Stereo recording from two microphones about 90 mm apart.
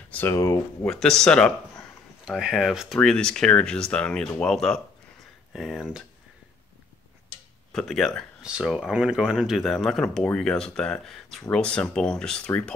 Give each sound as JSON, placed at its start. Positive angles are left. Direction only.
{"t": 0.3, "sound": "speech", "side_deg": 35}
{"t": 0.8, "sound": "speech", "side_deg": 5}
{"t": 2.2, "sound": "speech", "side_deg": -10}
{"t": 7.7, "sound": "speech", "side_deg": 5}
{"t": 8.4, "sound": "speech", "side_deg": -10}